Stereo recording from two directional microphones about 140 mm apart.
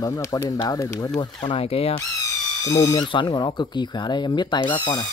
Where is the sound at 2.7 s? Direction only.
30° left (ahead or behind).